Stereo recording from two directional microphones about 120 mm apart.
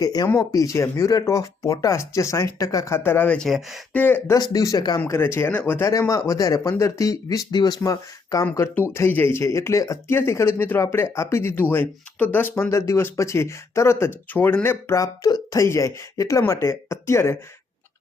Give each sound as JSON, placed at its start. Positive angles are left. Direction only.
{"t": 0.0, "sound": "speech", "side_deg": 30}
{"t": 3.9, "sound": "speech", "side_deg": 15}
{"t": 4.4, "sound": "speech", "side_deg": 30}
{"t": 4.9, "sound": "speech", "side_deg": 20}